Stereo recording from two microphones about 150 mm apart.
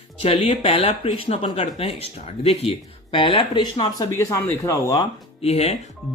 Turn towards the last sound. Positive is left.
turn(degrees=45)  # may be behind; listen again after turning